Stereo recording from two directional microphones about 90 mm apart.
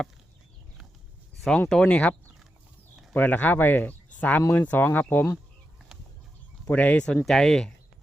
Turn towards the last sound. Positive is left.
turn(degrees=5)  # may be behind; listen again after turning